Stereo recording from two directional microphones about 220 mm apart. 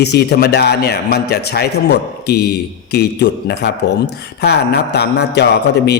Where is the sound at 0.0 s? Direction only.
50° left (ahead or behind).